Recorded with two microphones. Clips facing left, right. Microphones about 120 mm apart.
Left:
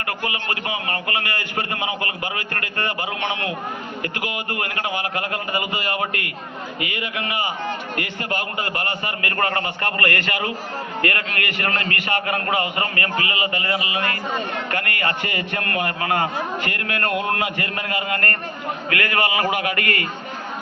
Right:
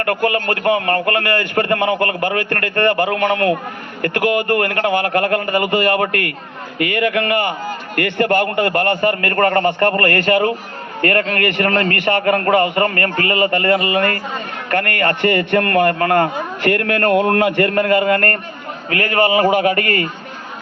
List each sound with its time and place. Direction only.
0.0 s a man's voice: 55° right (ahead or behind)
18.9 s a man's voice: 35° right (ahead or behind)